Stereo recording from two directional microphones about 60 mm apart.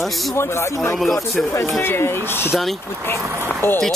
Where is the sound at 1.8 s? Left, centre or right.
Left.